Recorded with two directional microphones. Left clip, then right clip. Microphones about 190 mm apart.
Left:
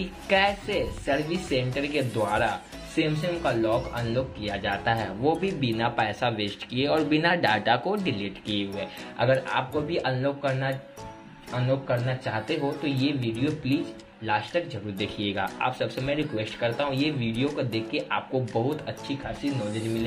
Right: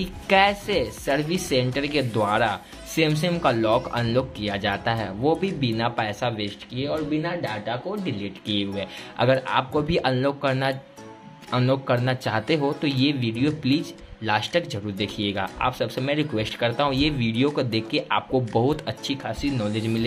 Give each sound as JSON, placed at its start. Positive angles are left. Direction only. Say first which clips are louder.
{"t": 0.0, "sound": "a woman's voice", "louder": "right 4 dB", "side_deg": -20}
{"t": 7.9, "sound": "speech", "louder": "left 2 dB", "side_deg": -5}
{"t": 8.5, "sound": "a woman's voice", "louder": "right 4 dB", "side_deg": -20}